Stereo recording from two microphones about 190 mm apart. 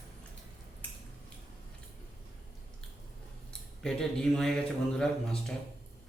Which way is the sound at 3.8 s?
5° left (ahead or behind).